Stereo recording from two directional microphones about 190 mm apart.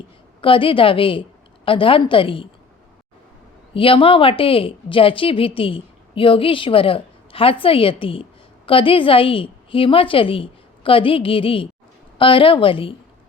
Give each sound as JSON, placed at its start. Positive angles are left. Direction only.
{"t": 0.4, "sound": "a woman's voice", "side_deg": 25}
{"t": 3.8, "sound": "a woman's voice", "side_deg": 30}